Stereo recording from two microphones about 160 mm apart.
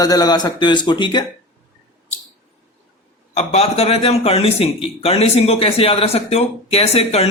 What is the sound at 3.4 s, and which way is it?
A man's voice, 40° left (ahead or behind).